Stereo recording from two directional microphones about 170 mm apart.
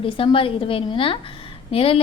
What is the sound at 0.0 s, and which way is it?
A woman's voice, 30° left (ahead or behind).